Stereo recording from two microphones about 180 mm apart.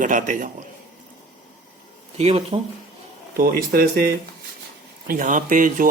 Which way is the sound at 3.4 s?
55° right (ahead or behind).